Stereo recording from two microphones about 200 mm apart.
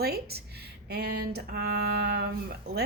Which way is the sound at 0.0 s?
50° right (ahead or behind).